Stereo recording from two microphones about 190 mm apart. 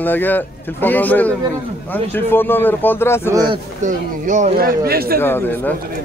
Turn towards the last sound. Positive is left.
turn(degrees=10)  # may be behind; listen again after turning